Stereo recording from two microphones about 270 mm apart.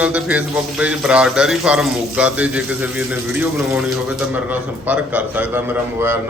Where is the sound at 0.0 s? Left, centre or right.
Centre.